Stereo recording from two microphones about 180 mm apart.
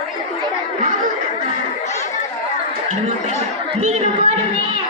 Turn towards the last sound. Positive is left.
turn(degrees=-35)  # may be behind; listen again after turning